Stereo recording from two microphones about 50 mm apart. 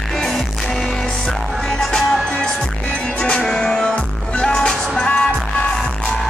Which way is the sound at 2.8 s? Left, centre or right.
Left.